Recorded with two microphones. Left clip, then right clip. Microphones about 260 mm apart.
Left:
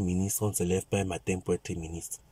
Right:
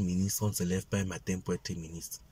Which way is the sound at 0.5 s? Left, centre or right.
Centre.